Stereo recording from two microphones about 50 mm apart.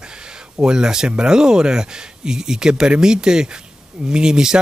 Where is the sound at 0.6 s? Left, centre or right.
Centre.